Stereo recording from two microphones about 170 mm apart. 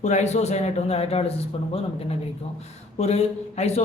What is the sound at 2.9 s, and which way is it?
Speech, 40° left (ahead or behind).